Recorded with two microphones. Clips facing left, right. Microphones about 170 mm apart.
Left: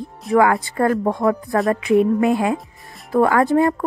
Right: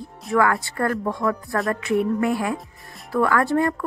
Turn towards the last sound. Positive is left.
turn(degrees=20)  # may be behind; listen again after turning